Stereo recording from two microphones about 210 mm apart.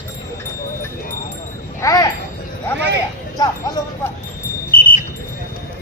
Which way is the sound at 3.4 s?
20° left (ahead or behind).